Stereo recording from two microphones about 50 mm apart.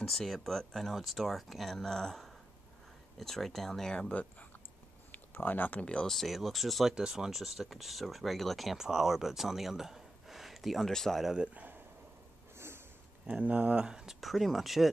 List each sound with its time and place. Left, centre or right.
0.0 s speech: centre
4.1 s speech: left
5.1 s speech: left
6.0 s speech: centre
11.3 s speech: right
12.5 s a sound: right
13.3 s speech: right
13.8 s speech: centre
14.2 s speech: centre